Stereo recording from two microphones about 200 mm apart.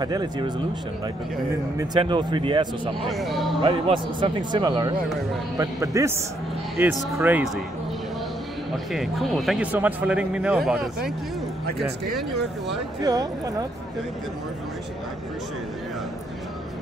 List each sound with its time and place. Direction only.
0.0 s speech: 20° right (ahead or behind)
2.0 s speech: 25° right (ahead or behind)
3.1 s speech: centre (ahead or behind)
3.6 s a man's voice: 25° right (ahead or behind); by 7.5 s 10° right (ahead or behind)
8.9 s speech: centre (ahead or behind)
12.2 s speech: centre (ahead or behind)
13.0 s speech: 20° right (ahead or behind)